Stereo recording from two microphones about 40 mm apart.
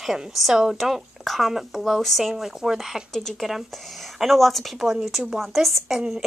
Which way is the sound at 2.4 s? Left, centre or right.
Centre.